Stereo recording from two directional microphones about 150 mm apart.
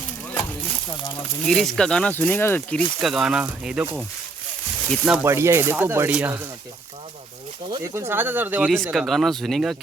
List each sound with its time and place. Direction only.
1.5 s speech: centre (ahead or behind)
3.0 s speech: centre (ahead or behind)
5.2 s speech: 15° right (ahead or behind)
7.9 s speech: 15° right (ahead or behind)
8.7 s speech: centre (ahead or behind)